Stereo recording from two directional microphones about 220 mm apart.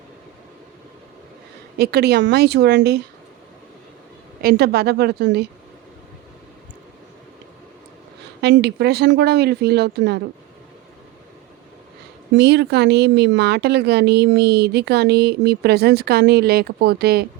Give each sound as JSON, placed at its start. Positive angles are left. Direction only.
{"t": 1.8, "sound": "speech", "side_deg": -45}
{"t": 4.4, "sound": "speech", "side_deg": -45}
{"t": 8.4, "sound": "speech", "side_deg": -50}
{"t": 12.3, "sound": "speech", "side_deg": -50}